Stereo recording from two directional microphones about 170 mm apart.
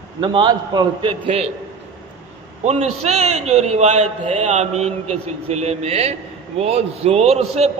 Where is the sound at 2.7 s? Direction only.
40° right (ahead or behind).